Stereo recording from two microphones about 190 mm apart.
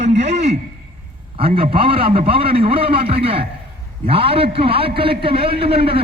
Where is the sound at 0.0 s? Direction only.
35° right (ahead or behind).